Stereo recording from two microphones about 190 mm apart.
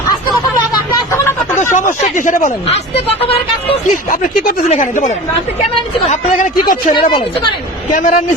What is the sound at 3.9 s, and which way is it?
A man's voice, 45° left (ahead or behind).